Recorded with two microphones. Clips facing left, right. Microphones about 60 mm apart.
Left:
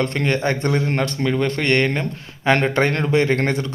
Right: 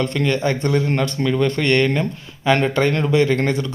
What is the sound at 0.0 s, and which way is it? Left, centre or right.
Speech, left.